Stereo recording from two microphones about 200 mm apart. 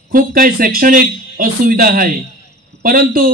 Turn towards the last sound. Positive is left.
turn(degrees=-45)  # may be behind; listen again after turning